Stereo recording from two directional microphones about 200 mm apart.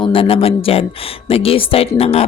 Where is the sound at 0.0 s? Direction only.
25° left (ahead or behind).